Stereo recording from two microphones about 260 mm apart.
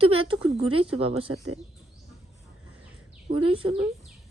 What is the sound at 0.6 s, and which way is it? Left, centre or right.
Speech, right.